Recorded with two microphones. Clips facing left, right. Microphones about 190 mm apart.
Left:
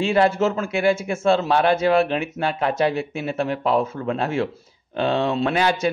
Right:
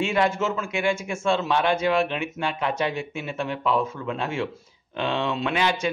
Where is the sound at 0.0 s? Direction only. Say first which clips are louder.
Left 5 dB; 35° left (ahead or behind).